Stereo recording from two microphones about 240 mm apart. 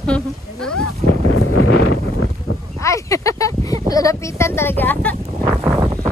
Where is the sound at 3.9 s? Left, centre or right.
Centre.